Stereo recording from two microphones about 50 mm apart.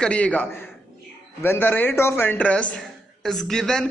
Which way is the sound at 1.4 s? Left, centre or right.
Left.